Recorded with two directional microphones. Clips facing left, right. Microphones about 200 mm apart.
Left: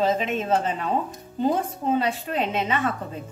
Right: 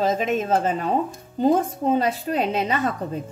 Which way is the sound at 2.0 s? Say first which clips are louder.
Right 3 dB; 40° right (ahead or behind).